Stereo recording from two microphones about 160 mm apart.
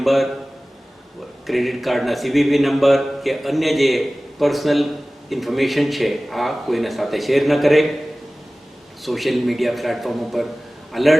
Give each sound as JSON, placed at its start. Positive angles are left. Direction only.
{"t": 0.0, "sound": "a man's voice", "side_deg": 0}
{"t": 1.5, "sound": "a man's voice", "side_deg": 0}
{"t": 9.0, "sound": "a man's voice", "side_deg": 0}